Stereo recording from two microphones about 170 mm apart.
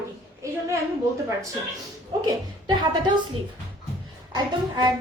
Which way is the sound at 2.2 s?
25° right (ahead or behind).